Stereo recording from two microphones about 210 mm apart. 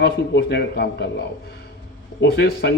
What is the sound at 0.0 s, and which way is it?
Speech, 50° left (ahead or behind).